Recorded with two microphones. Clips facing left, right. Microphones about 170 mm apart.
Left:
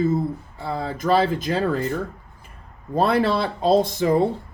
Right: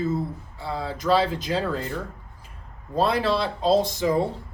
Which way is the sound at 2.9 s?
55° left (ahead or behind).